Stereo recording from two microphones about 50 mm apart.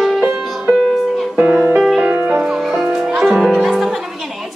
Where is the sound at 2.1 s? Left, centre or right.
Right.